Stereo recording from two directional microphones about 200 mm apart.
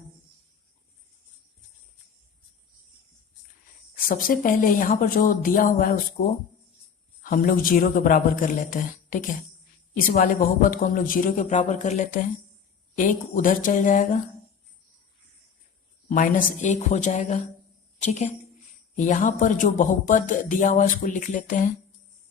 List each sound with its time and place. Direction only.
3.9 s speech: 45° left (ahead or behind)
16.0 s speech: 45° left (ahead or behind)